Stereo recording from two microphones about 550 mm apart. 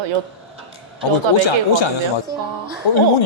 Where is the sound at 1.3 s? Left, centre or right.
Left.